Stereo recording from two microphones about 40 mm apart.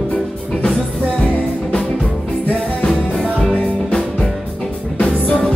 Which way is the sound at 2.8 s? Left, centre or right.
Left.